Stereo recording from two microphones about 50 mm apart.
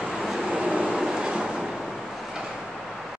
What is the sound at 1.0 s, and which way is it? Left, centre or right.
Train, centre.